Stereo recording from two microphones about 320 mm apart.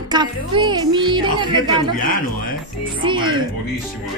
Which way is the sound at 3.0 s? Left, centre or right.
Centre.